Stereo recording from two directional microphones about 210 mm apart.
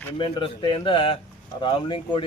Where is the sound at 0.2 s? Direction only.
25° left (ahead or behind).